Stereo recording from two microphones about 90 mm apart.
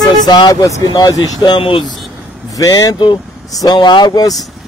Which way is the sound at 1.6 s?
75° left (ahead or behind).